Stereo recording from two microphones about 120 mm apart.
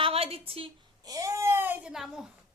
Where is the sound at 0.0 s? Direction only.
55° right (ahead or behind).